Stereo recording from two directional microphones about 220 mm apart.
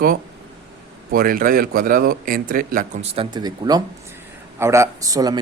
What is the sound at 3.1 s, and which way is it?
Speech, 20° right (ahead or behind).